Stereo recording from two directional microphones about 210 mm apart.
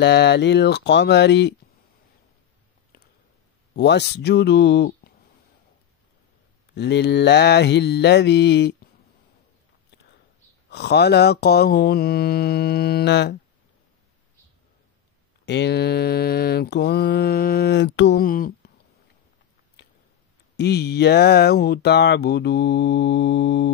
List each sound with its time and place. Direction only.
0.0 s speech: 55° left (ahead or behind)
3.7 s speech: 55° left (ahead or behind)
6.7 s speech: 55° left (ahead or behind)
10.7 s speech: 50° left (ahead or behind)
15.4 s speech: 55° left (ahead or behind)
19.8 s a sound: 50° left (ahead or behind)
20.5 s speech: 50° left (ahead or behind)